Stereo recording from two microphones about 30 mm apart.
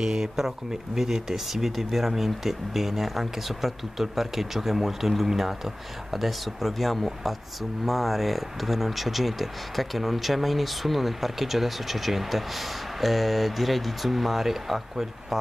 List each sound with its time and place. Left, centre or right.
0.0 s speech: centre